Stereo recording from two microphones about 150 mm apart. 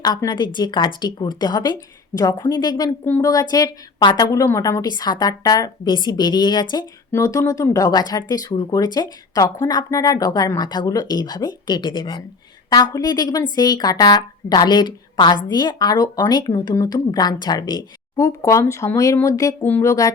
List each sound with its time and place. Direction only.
0.0 s speech: 25° left (ahead or behind)